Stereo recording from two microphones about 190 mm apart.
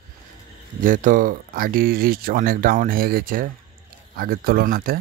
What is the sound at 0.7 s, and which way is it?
Speech, 45° right (ahead or behind).